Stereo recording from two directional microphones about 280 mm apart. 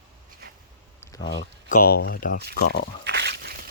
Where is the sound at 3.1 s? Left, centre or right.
Right.